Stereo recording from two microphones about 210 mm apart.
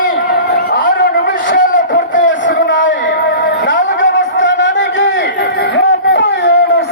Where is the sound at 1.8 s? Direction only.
55° left (ahead or behind).